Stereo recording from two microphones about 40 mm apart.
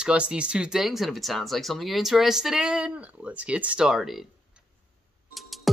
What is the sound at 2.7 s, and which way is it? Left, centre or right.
Speech, right.